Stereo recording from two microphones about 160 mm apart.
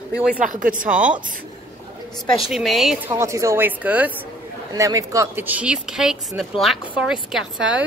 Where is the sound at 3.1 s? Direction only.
20° right (ahead or behind).